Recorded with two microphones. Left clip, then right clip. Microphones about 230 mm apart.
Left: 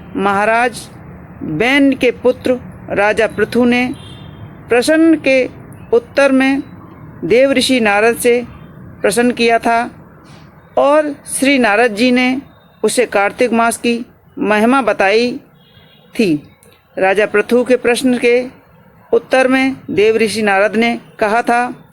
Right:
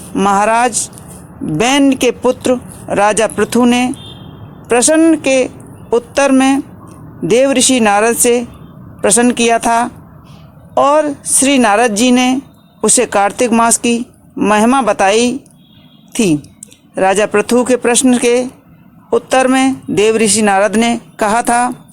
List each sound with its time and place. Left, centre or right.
0.2 s speech: right